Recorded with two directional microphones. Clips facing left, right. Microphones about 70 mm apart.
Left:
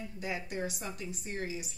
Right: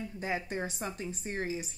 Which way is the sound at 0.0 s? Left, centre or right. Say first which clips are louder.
Right 3 dB; right.